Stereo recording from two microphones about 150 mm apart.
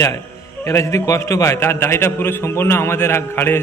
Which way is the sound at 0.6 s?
20° left (ahead or behind).